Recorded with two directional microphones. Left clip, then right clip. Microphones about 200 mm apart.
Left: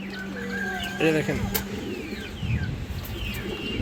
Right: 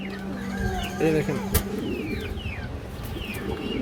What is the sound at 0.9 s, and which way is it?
Speech, 5° left (ahead or behind).